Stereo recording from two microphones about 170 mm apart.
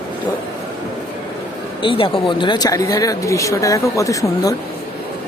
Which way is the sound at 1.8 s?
30° left (ahead or behind).